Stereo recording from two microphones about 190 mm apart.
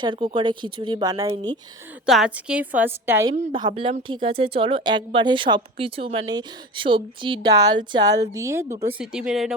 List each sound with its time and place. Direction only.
0.0 s speech: 25° right (ahead or behind)
2.0 s a woman's voice: 5° right (ahead or behind)
3.3 s a woman's voice: 35° right (ahead or behind)
3.6 s a woman's voice: 25° right (ahead or behind)
9.0 s speech: 5° right (ahead or behind)